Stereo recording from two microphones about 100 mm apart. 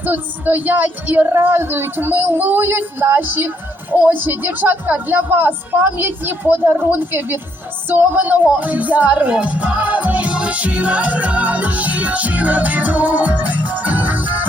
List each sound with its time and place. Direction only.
0.0 s speech: 20° right (ahead or behind)
7.9 s music: 20° right (ahead or behind)